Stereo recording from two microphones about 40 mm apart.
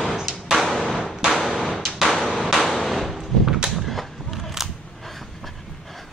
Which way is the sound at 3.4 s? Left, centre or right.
Centre.